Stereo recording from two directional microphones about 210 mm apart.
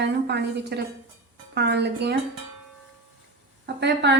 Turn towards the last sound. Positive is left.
turn(degrees=-55)  # may be behind; listen again after turning